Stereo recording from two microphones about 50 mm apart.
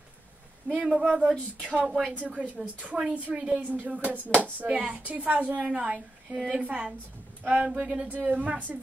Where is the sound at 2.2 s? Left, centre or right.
Right.